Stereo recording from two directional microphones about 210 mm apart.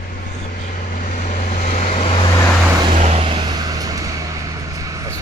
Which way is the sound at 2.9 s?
30° right (ahead or behind).